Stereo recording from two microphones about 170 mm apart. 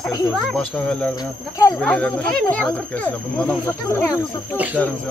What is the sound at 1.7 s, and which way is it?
Speech, 5° left (ahead or behind).